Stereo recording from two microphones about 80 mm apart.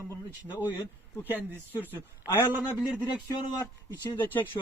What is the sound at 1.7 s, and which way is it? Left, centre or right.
A man's voice, left.